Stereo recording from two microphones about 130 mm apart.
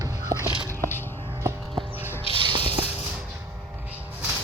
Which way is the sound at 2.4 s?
40° right (ahead or behind).